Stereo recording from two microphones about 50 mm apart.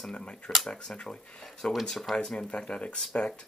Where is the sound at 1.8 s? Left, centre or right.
Centre.